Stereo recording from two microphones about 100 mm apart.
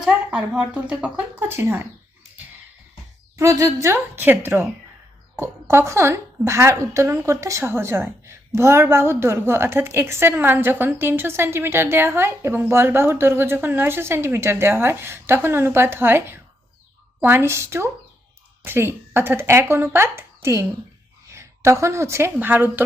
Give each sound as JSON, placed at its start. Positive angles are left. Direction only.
{"t": 0.0, "sound": "a woman's voice", "side_deg": -10}
{"t": 3.3, "sound": "a woman's voice", "side_deg": -30}